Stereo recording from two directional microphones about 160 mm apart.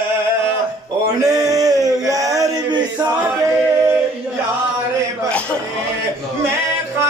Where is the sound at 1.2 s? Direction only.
20° right (ahead or behind).